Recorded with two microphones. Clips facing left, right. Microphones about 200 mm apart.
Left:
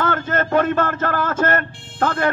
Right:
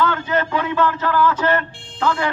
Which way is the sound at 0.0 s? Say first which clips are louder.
Right 1 dB; 50° left (ahead or behind).